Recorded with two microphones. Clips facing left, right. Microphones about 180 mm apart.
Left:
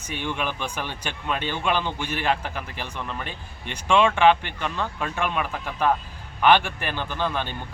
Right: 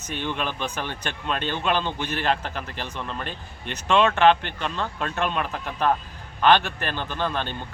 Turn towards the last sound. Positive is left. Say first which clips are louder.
# even
turn(degrees=15)  # may be behind; listen again after turning